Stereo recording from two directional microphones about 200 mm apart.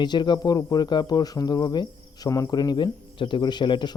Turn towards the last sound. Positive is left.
turn(degrees=25)  # may be behind; listen again after turning